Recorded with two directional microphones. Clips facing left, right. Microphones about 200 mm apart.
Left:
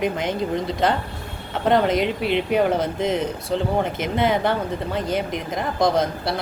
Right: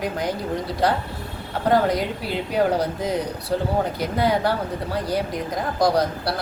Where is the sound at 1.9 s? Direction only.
20° left (ahead or behind).